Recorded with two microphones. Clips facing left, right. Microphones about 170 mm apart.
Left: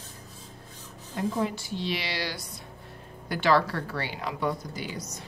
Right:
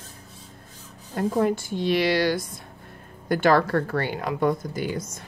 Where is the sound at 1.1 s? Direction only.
50° right (ahead or behind).